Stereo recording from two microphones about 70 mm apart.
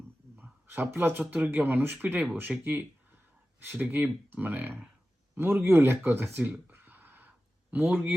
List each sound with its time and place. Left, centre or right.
0.3 s a sound: right
1.3 s speech: right
2.5 s speech: centre
3.6 s speech: right